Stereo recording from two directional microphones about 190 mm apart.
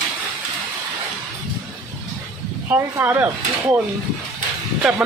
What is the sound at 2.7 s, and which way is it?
Speech, 10° right (ahead or behind).